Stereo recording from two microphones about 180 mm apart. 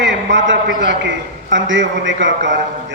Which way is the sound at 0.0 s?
90° right.